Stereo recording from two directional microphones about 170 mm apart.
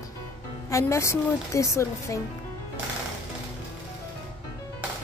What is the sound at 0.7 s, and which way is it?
Speech, 15° left (ahead or behind).